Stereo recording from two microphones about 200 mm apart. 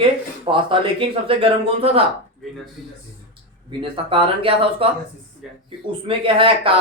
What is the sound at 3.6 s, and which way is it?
Speech, 25° right (ahead or behind).